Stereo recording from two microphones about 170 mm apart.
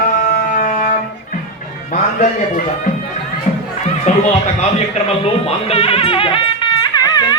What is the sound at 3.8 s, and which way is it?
Speech, 40° left (ahead or behind).